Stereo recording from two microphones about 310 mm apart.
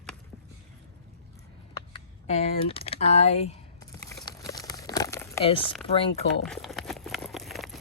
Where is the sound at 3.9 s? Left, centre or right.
Centre.